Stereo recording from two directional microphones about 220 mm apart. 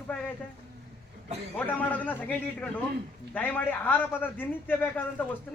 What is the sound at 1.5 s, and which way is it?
A man's voice, 5° left (ahead or behind).